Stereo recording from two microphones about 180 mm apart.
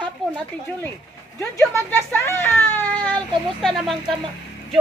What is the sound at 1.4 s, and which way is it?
A woman's voice, 15° left (ahead or behind).